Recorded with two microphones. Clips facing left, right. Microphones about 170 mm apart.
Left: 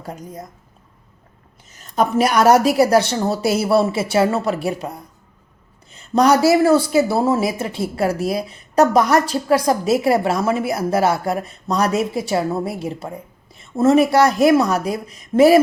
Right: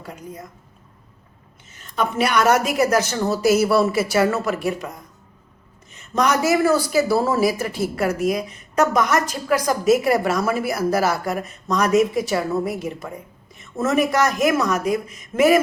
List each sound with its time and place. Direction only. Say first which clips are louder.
0.0 s a woman's voice: left 3 dB; 40° left (ahead or behind)
1.7 s a woman's voice: left 5 dB; 40° left (ahead or behind)